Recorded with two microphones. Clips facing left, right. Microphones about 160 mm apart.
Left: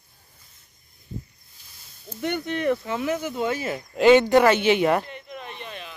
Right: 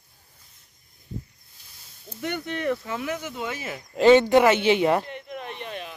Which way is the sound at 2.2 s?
20° left (ahead or behind).